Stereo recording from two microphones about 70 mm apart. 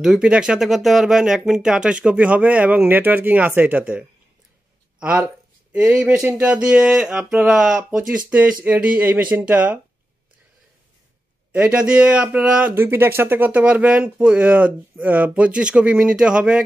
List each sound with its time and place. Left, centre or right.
0.0 s speech: centre
5.7 s speech: centre
8.3 s speech: right
11.5 s speech: centre
12.7 s speech: right; by 16.6 s centre